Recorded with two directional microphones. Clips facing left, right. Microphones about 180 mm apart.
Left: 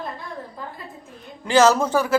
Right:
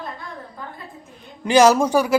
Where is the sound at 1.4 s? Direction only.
15° right (ahead or behind).